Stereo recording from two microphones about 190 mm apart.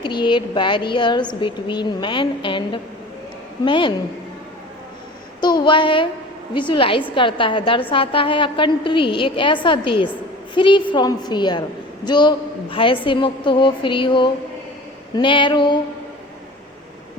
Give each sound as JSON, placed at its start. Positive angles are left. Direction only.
{"t": 0.0, "sound": "a woman's voice", "side_deg": 25}
{"t": 5.4, "sound": "a woman's voice", "side_deg": 20}